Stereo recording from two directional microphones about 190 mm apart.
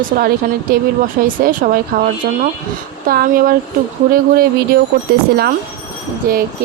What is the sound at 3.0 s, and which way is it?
Speech, 50° right (ahead or behind).